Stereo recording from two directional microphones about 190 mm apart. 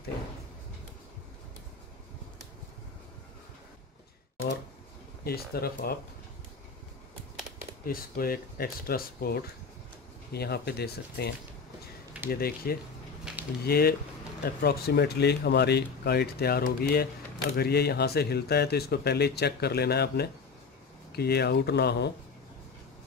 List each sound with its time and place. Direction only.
5.2 s speech: 55° left (ahead or behind)
7.8 s speech: 50° left (ahead or behind)
12.3 s speech: 50° left (ahead or behind)
13.3 s a sound: 5° right (ahead or behind)
13.7 s speech: 55° left (ahead or behind)